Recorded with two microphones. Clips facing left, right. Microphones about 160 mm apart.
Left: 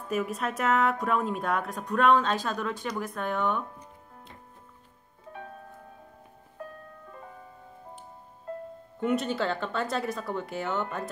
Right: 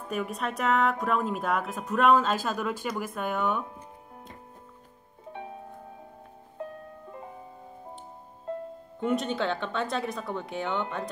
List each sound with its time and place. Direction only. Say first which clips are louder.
0.1 s speech: left 2 dB; centre (ahead or behind)
5.3 s music: right 3 dB; 20° right (ahead or behind)
6.6 s music: right 4 dB; 25° right (ahead or behind)
9.0 s speech: even; centre (ahead or behind)